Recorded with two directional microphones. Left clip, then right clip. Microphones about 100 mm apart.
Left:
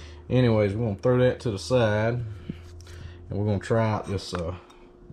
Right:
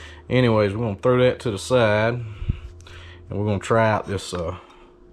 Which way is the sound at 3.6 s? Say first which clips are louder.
Right 8 dB; 10° left (ahead or behind).